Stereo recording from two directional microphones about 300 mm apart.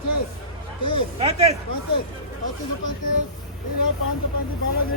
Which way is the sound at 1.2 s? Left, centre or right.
Right.